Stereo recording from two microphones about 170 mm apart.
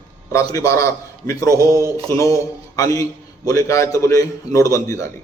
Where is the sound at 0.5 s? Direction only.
20° left (ahead or behind).